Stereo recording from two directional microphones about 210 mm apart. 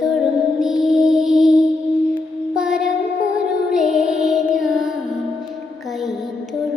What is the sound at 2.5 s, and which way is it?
Child singing, 5° right (ahead or behind).